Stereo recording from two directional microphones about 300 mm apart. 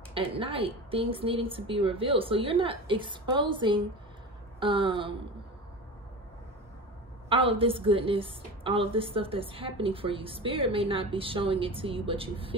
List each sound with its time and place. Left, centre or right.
0.1 s a woman's voice: centre
7.2 s a woman's voice: centre